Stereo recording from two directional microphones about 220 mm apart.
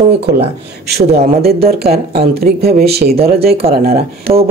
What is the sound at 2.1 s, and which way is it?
Speech, 25° right (ahead or behind).